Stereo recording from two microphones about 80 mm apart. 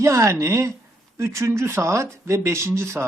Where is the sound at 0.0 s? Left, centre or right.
Right.